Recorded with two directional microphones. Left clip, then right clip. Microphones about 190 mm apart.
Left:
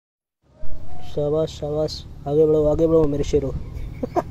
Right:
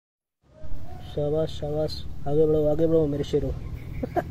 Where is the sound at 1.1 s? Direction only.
10° left (ahead or behind).